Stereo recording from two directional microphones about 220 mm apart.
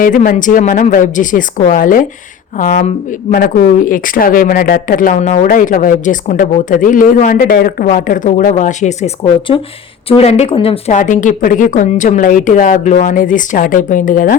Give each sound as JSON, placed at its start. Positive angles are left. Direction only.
{"t": 0.0, "sound": "speech", "side_deg": 35}